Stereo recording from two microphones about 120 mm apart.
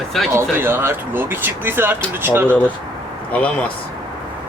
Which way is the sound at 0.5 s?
20° right (ahead or behind).